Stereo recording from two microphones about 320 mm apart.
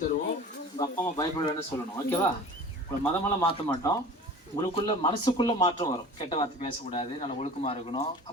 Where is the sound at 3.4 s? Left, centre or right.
Centre.